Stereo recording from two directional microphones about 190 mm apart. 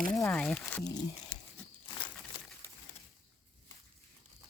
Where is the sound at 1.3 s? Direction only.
5° left (ahead or behind).